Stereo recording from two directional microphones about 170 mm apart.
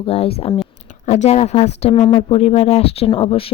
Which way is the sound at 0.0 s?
35° left (ahead or behind).